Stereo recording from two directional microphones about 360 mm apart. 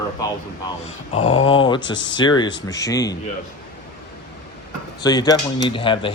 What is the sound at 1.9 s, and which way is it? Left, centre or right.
Speech, left.